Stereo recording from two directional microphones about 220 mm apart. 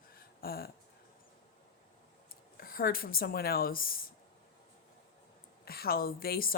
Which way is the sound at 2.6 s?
40° left (ahead or behind).